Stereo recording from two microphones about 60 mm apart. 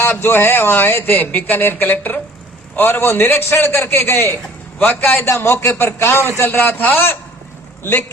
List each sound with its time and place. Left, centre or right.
0.0 s a man's voice: left